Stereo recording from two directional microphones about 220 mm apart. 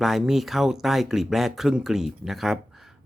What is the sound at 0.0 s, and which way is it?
Speech, centre (ahead or behind).